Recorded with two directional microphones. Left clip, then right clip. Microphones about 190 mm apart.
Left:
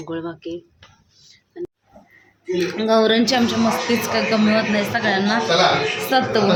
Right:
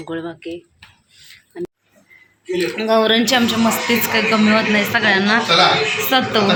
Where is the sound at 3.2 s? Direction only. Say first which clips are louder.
Right 3 dB; centre (ahead or behind).